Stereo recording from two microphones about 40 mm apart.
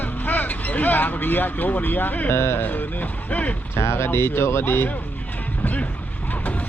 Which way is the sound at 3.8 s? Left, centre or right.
Left.